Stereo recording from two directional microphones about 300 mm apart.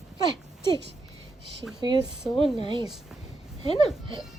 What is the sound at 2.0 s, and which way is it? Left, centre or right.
Speech, centre.